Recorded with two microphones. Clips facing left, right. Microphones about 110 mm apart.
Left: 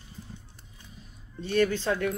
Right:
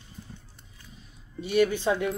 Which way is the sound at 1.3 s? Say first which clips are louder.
Right 2 dB; 15° right (ahead or behind).